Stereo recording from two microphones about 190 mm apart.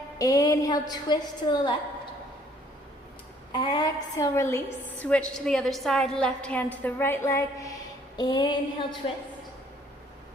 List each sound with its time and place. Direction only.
0.2 s a woman's voice: 20° left (ahead or behind)
3.5 s a woman's voice: 25° left (ahead or behind)